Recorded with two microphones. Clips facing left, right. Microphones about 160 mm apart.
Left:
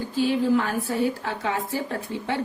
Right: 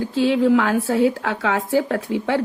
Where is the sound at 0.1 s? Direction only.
85° right.